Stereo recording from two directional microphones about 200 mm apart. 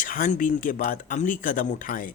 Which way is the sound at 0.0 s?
40° left (ahead or behind).